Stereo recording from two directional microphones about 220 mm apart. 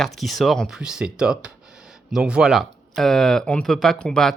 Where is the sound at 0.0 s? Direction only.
Centre (ahead or behind).